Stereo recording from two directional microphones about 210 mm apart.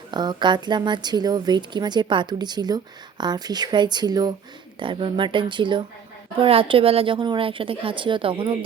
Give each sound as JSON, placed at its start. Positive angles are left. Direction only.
{"t": 0.1, "sound": "a woman's voice", "side_deg": -20}